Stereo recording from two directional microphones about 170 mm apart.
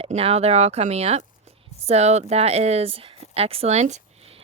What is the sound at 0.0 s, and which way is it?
Speech, 35° right (ahead or behind).